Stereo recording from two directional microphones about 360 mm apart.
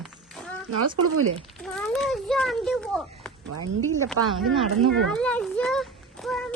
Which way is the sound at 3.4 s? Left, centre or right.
Right.